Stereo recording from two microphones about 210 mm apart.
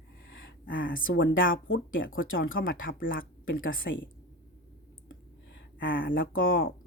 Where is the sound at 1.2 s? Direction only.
65° left (ahead or behind).